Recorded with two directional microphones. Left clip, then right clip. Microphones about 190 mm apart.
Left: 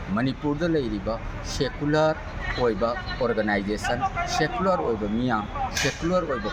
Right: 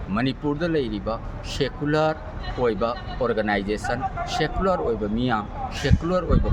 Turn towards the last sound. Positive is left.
turn(degrees=-35)  # may be behind; listen again after turning